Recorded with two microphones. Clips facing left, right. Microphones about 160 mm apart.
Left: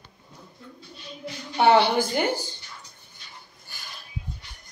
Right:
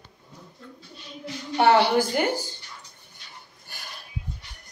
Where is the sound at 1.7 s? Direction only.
10° right (ahead or behind).